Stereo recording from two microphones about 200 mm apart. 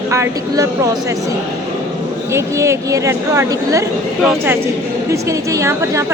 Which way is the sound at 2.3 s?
15° right (ahead or behind).